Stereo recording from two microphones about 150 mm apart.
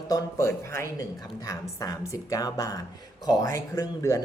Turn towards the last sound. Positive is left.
turn(degrees=20)  # may be behind; listen again after turning